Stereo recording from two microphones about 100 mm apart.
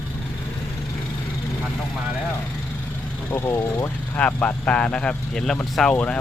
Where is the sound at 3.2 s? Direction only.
25° left (ahead or behind).